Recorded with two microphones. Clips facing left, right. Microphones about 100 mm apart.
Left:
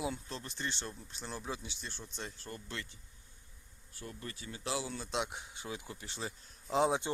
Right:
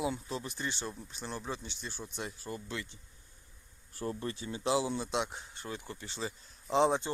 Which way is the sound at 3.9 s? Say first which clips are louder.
Right 9 dB; 35° right (ahead or behind).